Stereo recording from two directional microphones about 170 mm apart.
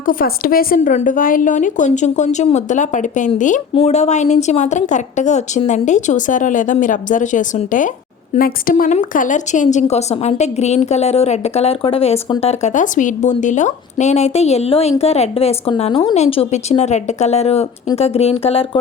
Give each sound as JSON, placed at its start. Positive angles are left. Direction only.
{"t": 0.0, "sound": "a woman's voice", "side_deg": 55}
{"t": 0.8, "sound": "a woman's voice", "side_deg": 45}